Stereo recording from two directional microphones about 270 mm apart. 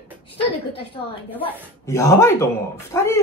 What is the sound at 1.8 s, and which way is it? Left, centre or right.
Speech, centre.